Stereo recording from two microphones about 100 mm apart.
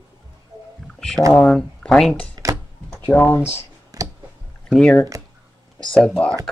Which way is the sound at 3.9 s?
35° right (ahead or behind).